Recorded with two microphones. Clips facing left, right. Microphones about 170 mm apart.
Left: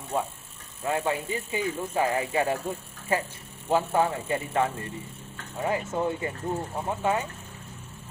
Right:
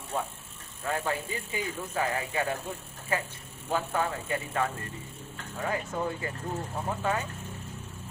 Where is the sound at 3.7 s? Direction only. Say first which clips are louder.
Left 6 dB; 25° left (ahead or behind).